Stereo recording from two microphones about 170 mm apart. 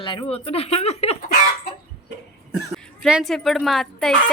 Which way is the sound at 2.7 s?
Centre (ahead or behind).